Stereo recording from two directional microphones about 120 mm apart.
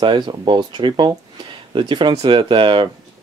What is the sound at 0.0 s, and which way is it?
Speech, 40° right (ahead or behind).